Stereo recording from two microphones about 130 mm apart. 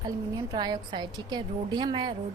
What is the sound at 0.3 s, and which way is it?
A woman's voice, 35° right (ahead or behind).